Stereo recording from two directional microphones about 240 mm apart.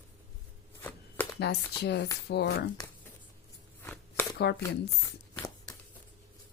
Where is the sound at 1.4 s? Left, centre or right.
Left.